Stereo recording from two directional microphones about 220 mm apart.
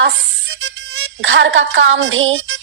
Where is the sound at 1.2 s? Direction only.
60° right (ahead or behind).